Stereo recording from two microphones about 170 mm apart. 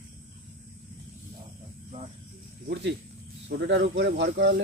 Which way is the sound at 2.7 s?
90° right.